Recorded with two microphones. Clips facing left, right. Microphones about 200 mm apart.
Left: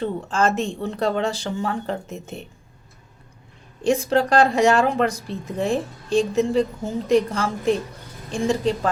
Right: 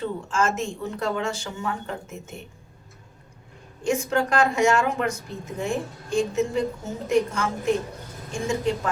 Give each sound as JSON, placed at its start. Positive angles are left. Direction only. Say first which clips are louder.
{"t": 0.0, "sound": "speech", "louder": "left 3 dB", "side_deg": 35}
{"t": 3.8, "sound": "speech", "louder": "left 4 dB", "side_deg": 35}